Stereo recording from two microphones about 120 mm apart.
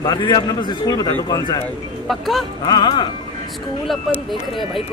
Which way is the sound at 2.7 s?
40° left (ahead or behind).